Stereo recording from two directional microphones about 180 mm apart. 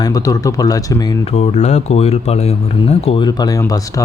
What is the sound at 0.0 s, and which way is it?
Speech, 20° left (ahead or behind).